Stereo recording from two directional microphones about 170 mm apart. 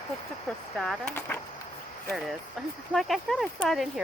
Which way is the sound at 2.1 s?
Centre (ahead or behind).